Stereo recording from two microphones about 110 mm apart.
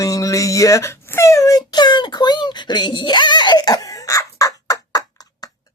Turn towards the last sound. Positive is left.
turn(degrees=35)  # may be behind; listen again after turning